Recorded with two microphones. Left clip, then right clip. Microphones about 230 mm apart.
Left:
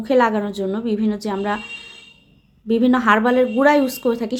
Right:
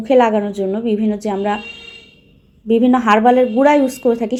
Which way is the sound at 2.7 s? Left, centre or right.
Centre.